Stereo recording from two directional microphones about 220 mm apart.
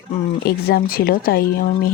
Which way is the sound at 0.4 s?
45° left (ahead or behind).